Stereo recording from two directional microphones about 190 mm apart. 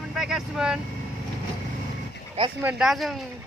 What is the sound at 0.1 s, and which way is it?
Speech, 5° right (ahead or behind).